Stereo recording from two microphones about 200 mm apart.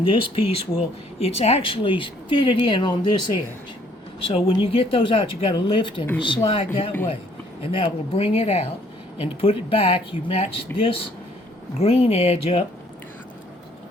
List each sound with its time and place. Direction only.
0.0 s speech: 25° left (ahead or behind)